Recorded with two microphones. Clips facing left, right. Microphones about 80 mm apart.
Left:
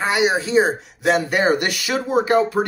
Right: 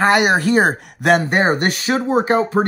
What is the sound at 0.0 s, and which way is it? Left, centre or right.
Speech, right.